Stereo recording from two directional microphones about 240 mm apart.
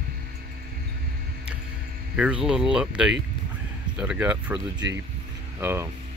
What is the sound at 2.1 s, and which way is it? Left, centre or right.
Speech, centre.